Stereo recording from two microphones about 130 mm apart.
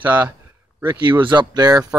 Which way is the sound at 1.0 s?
35° right (ahead or behind).